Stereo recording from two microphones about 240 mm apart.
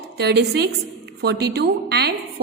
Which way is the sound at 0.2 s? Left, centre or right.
Right.